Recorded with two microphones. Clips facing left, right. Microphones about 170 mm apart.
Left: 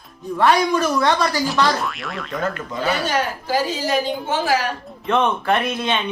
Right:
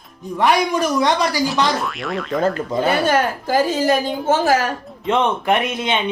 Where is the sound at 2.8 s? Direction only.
50° right (ahead or behind).